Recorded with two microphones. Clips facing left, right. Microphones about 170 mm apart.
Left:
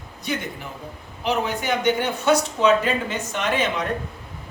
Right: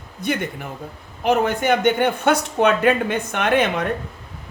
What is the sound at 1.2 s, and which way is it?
Speech, 55° right (ahead or behind).